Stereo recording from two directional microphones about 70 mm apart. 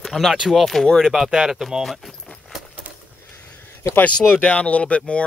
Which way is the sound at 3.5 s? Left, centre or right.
Left.